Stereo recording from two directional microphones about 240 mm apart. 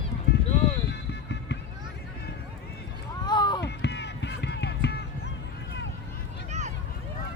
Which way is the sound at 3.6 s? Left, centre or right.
Left.